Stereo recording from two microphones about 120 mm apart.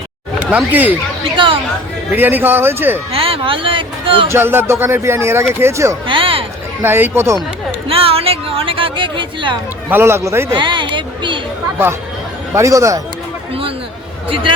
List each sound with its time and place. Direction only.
0.3 s speech: 15° right (ahead or behind)
2.1 s a man's voice: 15° right (ahead or behind)
3.1 s speech: 55° right (ahead or behind)
4.3 s speech: 20° right (ahead or behind)
6.1 s speech: 45° right (ahead or behind)
6.8 s speech: 20° right (ahead or behind)
7.9 s speech: 50° right (ahead or behind)
9.9 s speech: 20° right (ahead or behind)
10.5 s speech: 40° right (ahead or behind)
12.5 s speech: 25° right (ahead or behind)
13.5 s a sound: 50° right (ahead or behind)
14.3 s speech: 45° right (ahead or behind)